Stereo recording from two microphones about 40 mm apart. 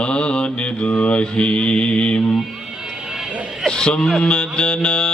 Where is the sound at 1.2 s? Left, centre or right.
Left.